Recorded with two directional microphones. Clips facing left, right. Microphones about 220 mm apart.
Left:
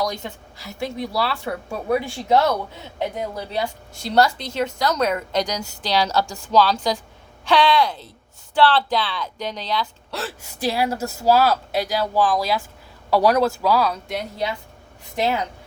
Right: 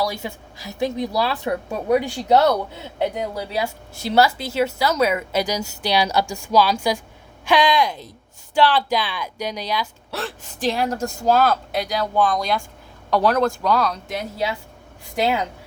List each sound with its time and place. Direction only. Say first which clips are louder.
0.0 s speech: right 1 dB; 5° right (ahead or behind)
10.2 s a woman's voice: right 1 dB; 5° left (ahead or behind); by 15.4 s 10° right (ahead or behind)